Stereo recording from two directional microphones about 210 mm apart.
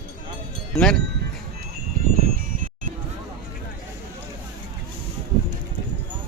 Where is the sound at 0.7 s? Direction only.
5° left (ahead or behind).